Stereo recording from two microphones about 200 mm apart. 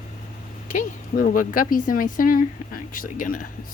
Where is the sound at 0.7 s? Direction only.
40° left (ahead or behind).